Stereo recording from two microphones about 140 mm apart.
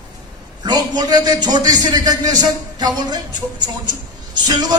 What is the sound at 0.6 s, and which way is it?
Speech, 30° right (ahead or behind).